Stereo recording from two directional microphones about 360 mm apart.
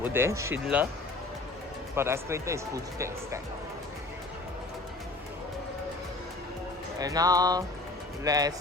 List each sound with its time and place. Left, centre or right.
0.0 s speech: centre
2.0 s speech: centre
7.0 s speech: centre